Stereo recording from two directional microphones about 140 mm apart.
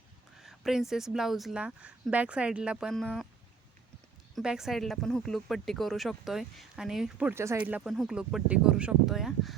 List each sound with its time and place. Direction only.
0.3 s speech: centre (ahead or behind)
4.4 s speech: 5° right (ahead or behind)
7.3 s speech: 20° right (ahead or behind)
7.6 s speech: 10° right (ahead or behind)